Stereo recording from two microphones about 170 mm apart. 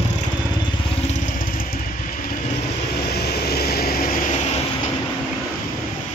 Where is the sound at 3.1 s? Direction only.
70° left (ahead or behind).